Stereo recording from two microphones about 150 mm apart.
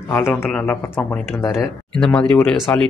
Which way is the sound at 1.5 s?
Centre (ahead or behind).